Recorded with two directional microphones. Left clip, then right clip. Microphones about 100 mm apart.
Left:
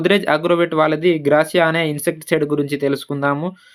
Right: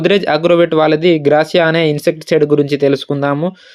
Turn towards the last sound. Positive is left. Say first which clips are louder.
# right 4 dB
turn(degrees=-30)  # may be behind; listen again after turning